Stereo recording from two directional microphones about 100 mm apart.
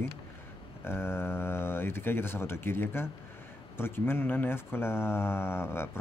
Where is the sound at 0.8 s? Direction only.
25° left (ahead or behind).